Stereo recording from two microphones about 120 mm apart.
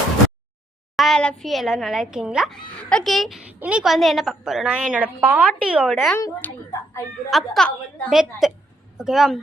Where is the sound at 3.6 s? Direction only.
10° right (ahead or behind).